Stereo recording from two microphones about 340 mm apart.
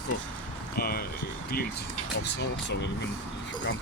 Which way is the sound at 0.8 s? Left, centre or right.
Left.